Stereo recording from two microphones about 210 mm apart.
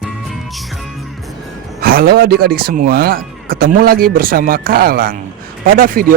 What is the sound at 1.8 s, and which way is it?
A man's voice, 45° right (ahead or behind).